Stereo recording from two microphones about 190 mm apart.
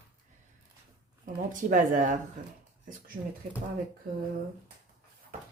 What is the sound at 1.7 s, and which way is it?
Speech, 40° right (ahead or behind).